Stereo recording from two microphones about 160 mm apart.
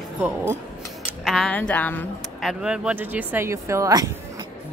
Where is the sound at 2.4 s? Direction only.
5° right (ahead or behind); by 4.5 s 20° right (ahead or behind).